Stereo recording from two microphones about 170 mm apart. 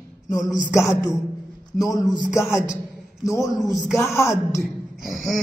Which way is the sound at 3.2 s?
20° left (ahead or behind).